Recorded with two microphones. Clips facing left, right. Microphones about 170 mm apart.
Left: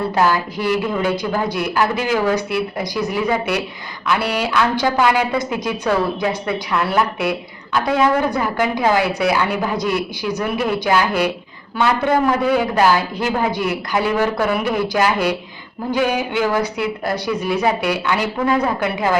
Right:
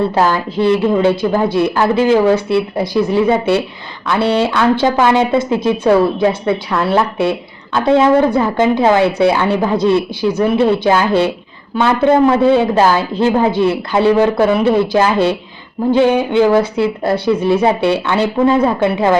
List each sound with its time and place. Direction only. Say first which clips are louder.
0.1 s a woman's voice: right 3 dB; 25° right (ahead or behind)